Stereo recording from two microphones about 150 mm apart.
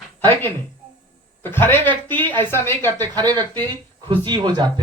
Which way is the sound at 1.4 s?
15° left (ahead or behind).